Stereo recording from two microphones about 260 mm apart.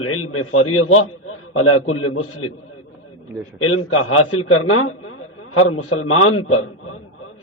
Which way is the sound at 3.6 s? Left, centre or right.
Left.